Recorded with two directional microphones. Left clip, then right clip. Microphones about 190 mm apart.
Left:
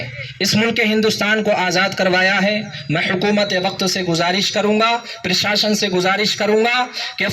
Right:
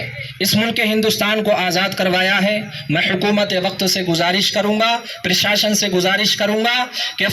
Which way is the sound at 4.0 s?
5° right (ahead or behind).